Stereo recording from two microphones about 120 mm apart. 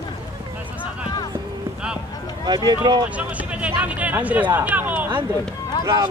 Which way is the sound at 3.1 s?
10° right (ahead or behind).